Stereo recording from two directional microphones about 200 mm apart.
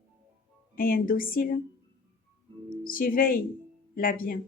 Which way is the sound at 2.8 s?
45° left (ahead or behind).